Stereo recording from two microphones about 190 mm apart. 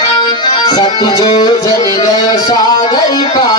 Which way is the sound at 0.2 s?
25° left (ahead or behind).